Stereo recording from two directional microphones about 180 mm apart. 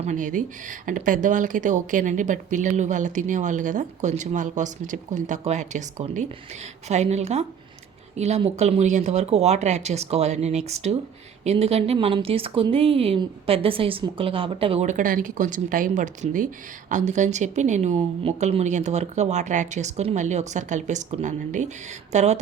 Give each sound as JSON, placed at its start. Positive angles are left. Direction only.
{"t": 0.0, "sound": "speech", "side_deg": -45}